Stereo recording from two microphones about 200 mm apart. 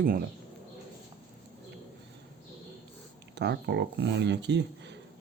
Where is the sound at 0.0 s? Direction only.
45° right (ahead or behind).